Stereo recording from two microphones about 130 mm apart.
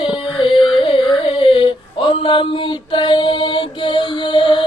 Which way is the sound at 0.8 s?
40° left (ahead or behind).